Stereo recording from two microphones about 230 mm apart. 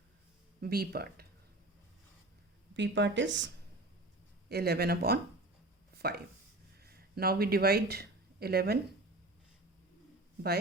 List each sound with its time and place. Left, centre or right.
0.6 s speech: right
2.7 s speech: right
5.9 s a sound: right
6.8 s speech: right